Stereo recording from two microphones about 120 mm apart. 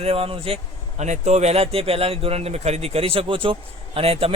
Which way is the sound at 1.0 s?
70° right (ahead or behind).